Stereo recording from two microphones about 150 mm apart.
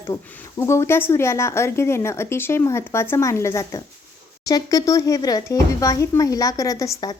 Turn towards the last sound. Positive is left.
turn(degrees=25)  # may be behind; listen again after turning